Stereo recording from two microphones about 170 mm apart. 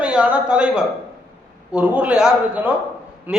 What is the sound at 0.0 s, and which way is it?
Speech, 5° right (ahead or behind).